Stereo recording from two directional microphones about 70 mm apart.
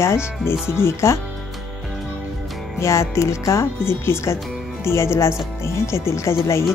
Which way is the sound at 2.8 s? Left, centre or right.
Left.